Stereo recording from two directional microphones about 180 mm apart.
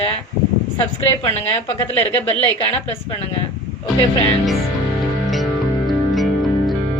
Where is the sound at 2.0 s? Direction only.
35° left (ahead or behind).